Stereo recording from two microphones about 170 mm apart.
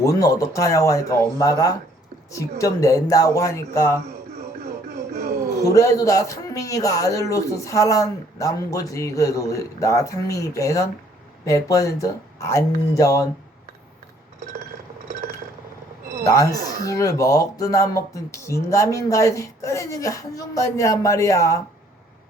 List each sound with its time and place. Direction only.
0.0 s a man's voice: 20° left (ahead or behind)
5.6 s a man's voice: 20° left (ahead or behind)
16.2 s a man's voice: 20° left (ahead or behind)